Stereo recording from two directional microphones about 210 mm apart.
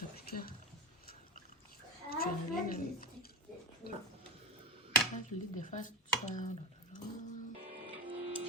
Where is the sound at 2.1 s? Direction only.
45° left (ahead or behind).